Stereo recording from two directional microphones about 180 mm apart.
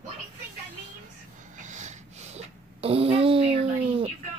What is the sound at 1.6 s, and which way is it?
Snort, 45° right (ahead or behind).